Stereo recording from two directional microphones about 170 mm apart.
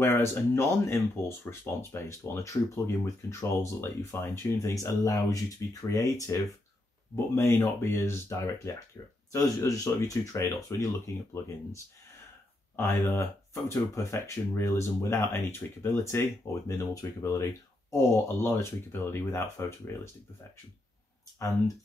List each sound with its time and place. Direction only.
0.0 s speech: 15° left (ahead or behind)
12.7 s speech: 15° left (ahead or behind)